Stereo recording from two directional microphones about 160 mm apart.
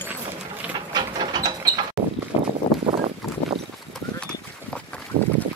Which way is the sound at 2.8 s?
35° right (ahead or behind).